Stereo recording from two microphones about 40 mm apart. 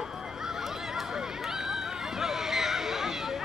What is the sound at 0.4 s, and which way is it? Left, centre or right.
Run, centre.